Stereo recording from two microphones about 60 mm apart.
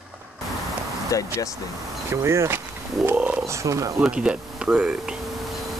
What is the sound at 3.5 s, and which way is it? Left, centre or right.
Speech, right.